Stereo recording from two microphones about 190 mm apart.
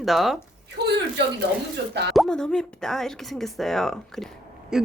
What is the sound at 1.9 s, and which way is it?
Speech, 60° right (ahead or behind).